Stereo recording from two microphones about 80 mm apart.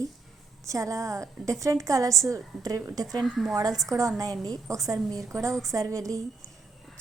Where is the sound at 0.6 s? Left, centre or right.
Right.